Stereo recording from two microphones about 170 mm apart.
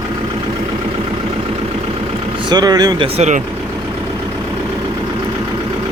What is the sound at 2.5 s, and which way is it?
Speech, 25° right (ahead or behind).